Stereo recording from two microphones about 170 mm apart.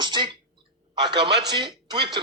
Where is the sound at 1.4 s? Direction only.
25° right (ahead or behind).